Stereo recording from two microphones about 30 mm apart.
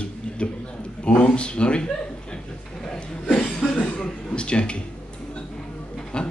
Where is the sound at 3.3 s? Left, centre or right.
Left.